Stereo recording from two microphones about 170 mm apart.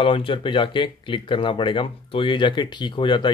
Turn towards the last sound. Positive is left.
turn(degrees=25)  # may be behind; listen again after turning